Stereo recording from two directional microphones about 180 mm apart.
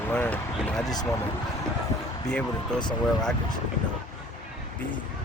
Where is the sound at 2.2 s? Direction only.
5° left (ahead or behind).